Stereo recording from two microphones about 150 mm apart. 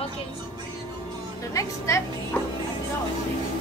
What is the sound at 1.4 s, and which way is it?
Speech, 20° left (ahead or behind).